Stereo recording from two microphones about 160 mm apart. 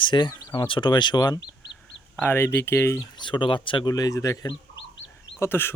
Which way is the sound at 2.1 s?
10° left (ahead or behind).